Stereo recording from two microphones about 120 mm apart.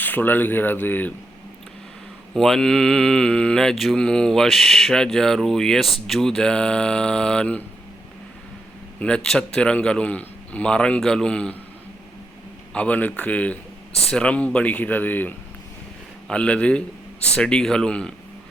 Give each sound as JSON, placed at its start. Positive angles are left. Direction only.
{"t": 0.0, "sound": "a man's voice", "side_deg": 15}
{"t": 2.3, "sound": "speech", "side_deg": 5}
{"t": 9.0, "sound": "a man's voice", "side_deg": 10}
{"t": 12.7, "sound": "a man's voice", "side_deg": 10}